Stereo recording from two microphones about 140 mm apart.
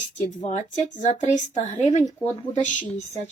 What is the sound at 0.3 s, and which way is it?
A woman's voice, 55° left (ahead or behind).